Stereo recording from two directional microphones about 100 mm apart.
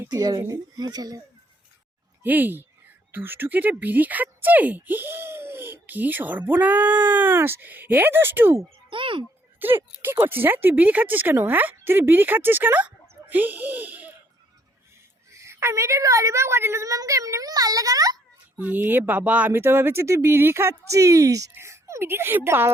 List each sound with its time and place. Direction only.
0.1 s a woman's voice: 40° right (ahead or behind)
2.2 s speech: 20° right (ahead or behind)
8.9 s a sound: 55° right (ahead or behind)
9.6 s speech: 20° right (ahead or behind)
15.3 s a woman's voice: 30° right (ahead or behind)
18.5 s speech: 15° right (ahead or behind)